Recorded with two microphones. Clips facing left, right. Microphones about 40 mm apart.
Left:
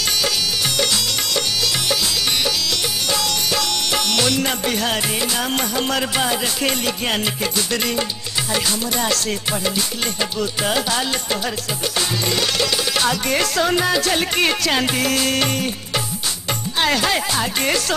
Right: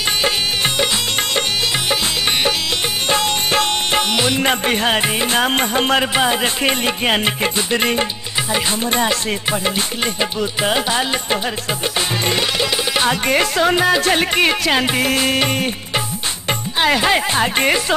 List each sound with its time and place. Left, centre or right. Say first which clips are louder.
3.1 s music: right 5 dB; right
4.1 s music: right 2 dB; right
4.4 s music: right 4 dB; right
10.6 s music: right 3 dB; right
12.3 s music: right 1 dB; right